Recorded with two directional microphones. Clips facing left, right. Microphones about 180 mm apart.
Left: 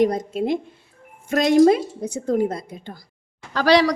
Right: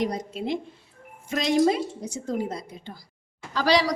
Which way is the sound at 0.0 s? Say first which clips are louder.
Left 8 dB; 50° left (ahead or behind).